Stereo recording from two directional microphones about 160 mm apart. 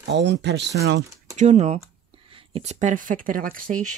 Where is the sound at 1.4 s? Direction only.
45° right (ahead or behind).